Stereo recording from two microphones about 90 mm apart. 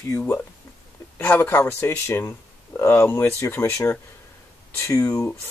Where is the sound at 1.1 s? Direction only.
25° left (ahead or behind).